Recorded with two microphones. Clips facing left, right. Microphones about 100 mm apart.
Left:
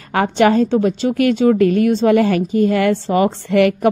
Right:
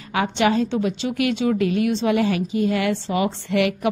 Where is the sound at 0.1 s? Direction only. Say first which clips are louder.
Left 6 dB; 50° left (ahead or behind).